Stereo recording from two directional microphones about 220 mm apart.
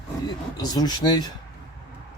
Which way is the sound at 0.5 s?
15° left (ahead or behind).